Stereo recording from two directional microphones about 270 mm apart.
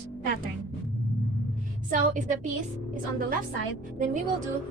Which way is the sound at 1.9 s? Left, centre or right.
Right.